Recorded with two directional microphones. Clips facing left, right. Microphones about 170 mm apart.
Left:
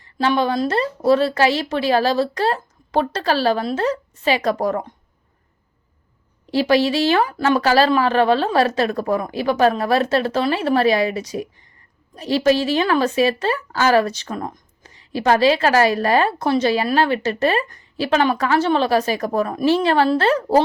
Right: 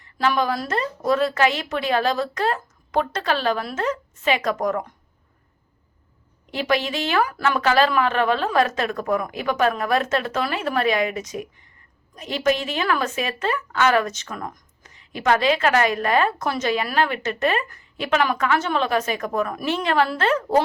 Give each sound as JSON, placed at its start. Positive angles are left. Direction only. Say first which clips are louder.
{"t": 0.0, "sound": "a woman's voice", "louder": "left 3 dB", "side_deg": 30}
{"t": 6.5, "sound": "a woman's voice", "louder": "left 7 dB", "side_deg": 35}